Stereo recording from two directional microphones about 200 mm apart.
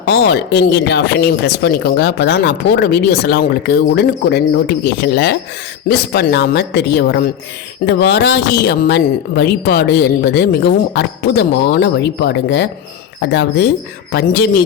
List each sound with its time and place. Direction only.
0.0 s speech: 60° left (ahead or behind)